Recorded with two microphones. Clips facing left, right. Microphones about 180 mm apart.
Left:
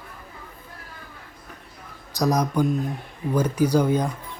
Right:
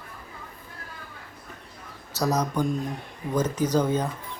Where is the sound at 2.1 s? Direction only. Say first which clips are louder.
Left 3 dB; 15° left (ahead or behind).